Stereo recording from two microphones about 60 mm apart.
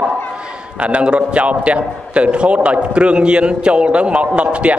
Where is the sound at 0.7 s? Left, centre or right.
Centre.